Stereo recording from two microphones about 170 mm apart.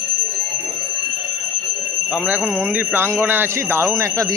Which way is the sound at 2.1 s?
5° right (ahead or behind).